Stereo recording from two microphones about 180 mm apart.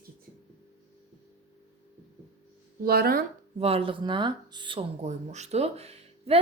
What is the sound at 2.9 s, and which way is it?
Speech, 55° right (ahead or behind).